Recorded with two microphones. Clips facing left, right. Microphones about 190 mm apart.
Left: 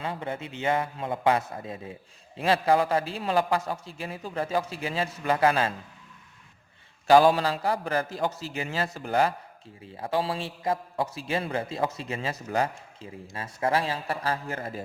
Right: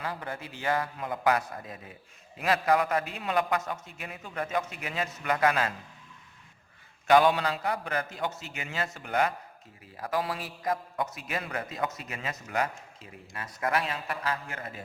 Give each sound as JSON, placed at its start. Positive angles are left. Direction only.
{"t": 0.0, "sound": "a man's voice", "side_deg": 25}
{"t": 7.1, "sound": "a man's voice", "side_deg": 35}